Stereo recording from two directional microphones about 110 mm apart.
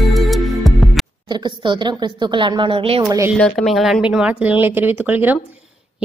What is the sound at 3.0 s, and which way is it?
Speech, 30° right (ahead or behind).